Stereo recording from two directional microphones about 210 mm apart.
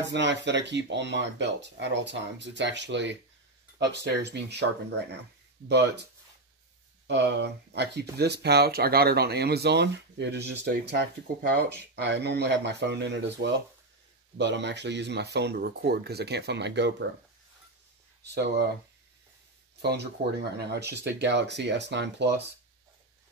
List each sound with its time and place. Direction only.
0.1 s speech: 55° right (ahead or behind)
7.1 s speech: 55° right (ahead or behind)
18.2 s speech: 55° right (ahead or behind)
19.8 s speech: 55° right (ahead or behind)